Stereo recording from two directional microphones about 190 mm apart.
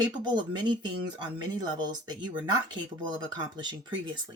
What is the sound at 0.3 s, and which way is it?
Speech, 25° right (ahead or behind).